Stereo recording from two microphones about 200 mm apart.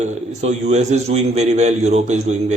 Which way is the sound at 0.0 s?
35° right (ahead or behind).